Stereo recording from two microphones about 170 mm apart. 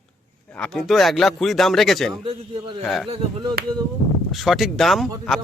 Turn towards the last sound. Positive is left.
turn(degrees=0)  # may be behind; listen again after turning